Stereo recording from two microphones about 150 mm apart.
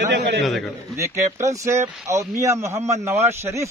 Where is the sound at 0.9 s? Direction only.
20° right (ahead or behind).